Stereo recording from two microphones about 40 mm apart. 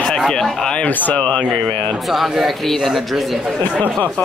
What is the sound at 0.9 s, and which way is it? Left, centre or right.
Speech, left.